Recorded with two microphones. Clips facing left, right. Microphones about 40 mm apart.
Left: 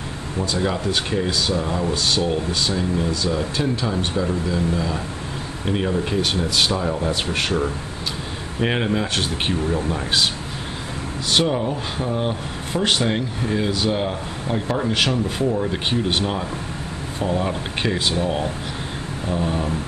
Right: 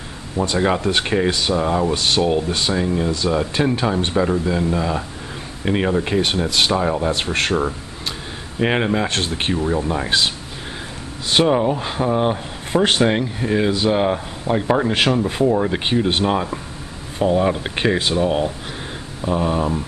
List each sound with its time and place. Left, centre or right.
0.4 s speech: right
8.5 s speech: centre
11.3 s speech: centre
17.2 s speech: centre